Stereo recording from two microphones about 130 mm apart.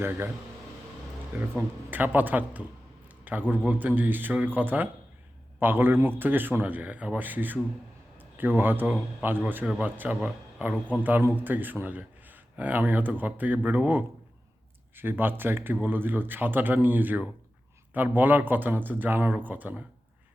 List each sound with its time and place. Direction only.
0.0 s a man's voice: 15° right (ahead or behind)
1.4 s a man's voice: 15° right (ahead or behind)